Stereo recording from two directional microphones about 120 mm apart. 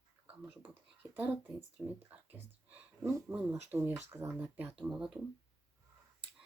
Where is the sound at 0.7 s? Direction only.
15° right (ahead or behind).